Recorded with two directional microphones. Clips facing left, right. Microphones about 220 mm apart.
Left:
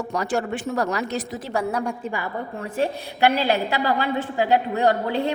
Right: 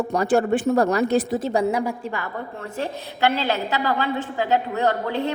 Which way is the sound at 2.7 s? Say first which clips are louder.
Left 4 dB; 15° left (ahead or behind).